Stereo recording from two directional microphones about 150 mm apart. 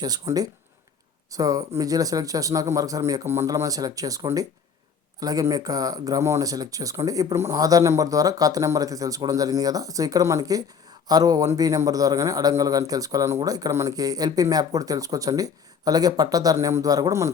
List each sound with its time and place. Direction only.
0.0 s a man's voice: 25° right (ahead or behind)